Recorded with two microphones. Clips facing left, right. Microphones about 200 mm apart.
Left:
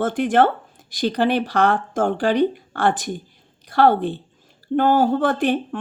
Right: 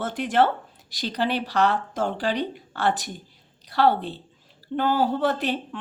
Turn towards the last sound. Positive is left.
turn(degrees=50)  # may be behind; listen again after turning